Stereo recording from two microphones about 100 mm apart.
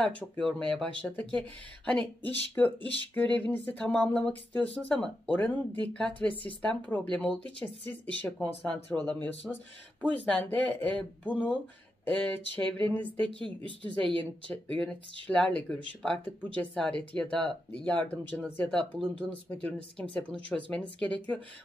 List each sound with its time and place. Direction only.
0.0 s speech: 5° left (ahead or behind)
14.5 s speech: 10° left (ahead or behind)